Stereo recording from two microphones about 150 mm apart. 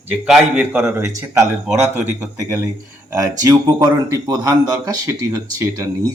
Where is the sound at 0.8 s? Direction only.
20° right (ahead or behind).